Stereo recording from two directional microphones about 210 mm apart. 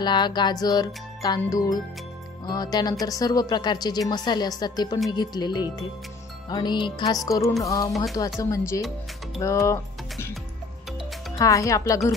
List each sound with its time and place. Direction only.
0.0 s music: 20° left (ahead or behind)
7.6 s speech: 15° left (ahead or behind)
7.9 s speech: centre (ahead or behind)
8.4 s speech: 15° left (ahead or behind)
11.3 s speech: 15° left (ahead or behind)